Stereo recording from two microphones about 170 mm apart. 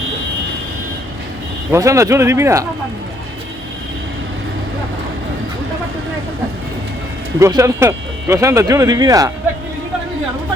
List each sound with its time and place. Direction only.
1.7 s speech: 20° right (ahead or behind)
7.3 s speech: 15° right (ahead or behind)